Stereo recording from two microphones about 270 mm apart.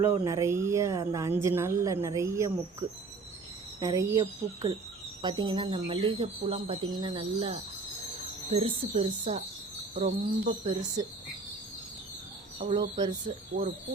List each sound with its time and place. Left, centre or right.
0.0 s a woman's voice: centre
3.8 s a woman's voice: centre; by 10.7 s right
12.5 s speech: right